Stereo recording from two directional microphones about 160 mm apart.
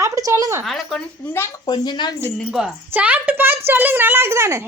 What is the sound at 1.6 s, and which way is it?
Speech, 30° left (ahead or behind).